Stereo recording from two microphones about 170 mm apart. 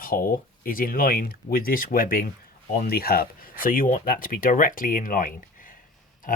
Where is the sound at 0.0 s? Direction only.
55° left (ahead or behind).